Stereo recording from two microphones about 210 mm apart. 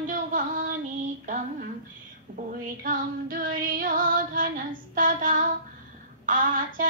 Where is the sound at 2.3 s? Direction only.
40° right (ahead or behind).